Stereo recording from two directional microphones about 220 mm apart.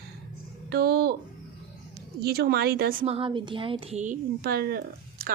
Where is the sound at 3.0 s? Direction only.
25° right (ahead or behind); by 5.3 s 45° right (ahead or behind).